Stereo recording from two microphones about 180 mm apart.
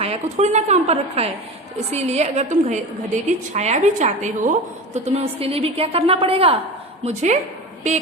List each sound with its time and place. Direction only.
0.0 s a woman's voice: 35° right (ahead or behind)